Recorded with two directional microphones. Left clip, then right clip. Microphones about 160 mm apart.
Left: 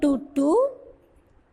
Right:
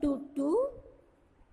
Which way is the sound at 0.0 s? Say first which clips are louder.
Left 9 dB; 45° left (ahead or behind).